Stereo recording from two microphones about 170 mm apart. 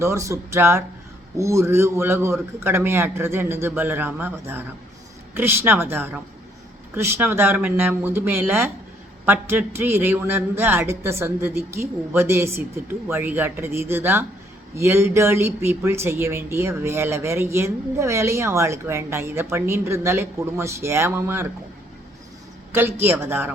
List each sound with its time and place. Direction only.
0.0 s speech: 15° right (ahead or behind)
22.7 s speech: 15° right (ahead or behind)